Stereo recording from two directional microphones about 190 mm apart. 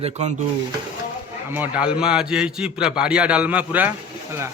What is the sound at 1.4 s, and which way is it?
A man's voice, 10° right (ahead or behind).